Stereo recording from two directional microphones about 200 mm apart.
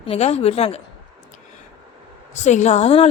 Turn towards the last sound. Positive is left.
turn(degrees=30)  # may be behind; listen again after turning